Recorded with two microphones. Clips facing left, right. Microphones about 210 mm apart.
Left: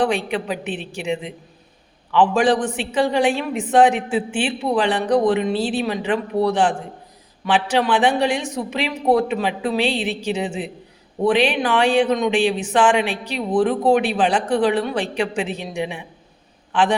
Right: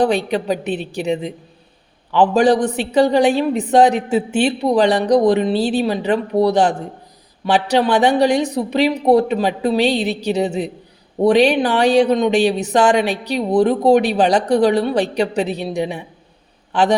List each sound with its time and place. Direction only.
0.0 s speech: 40° right (ahead or behind)